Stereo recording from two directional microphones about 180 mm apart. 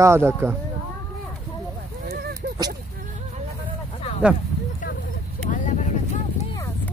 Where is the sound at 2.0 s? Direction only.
60° right (ahead or behind).